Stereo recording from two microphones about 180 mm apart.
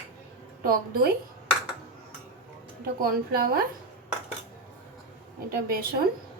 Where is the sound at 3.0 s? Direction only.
55° right (ahead or behind).